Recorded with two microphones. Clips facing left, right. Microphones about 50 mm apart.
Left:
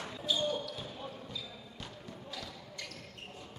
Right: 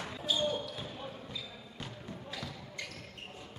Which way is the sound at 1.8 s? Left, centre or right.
Right.